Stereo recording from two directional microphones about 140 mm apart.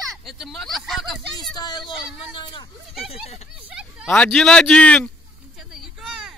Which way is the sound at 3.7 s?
5° right (ahead or behind).